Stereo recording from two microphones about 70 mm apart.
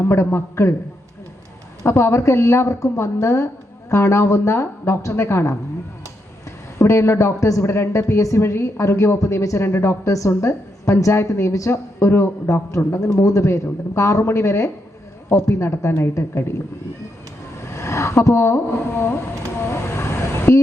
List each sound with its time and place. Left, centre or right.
0.0 s a man's voice: left
1.8 s a man's voice: left
6.7 s a man's voice: left
17.6 s speech: left
19.6 s vehicle: left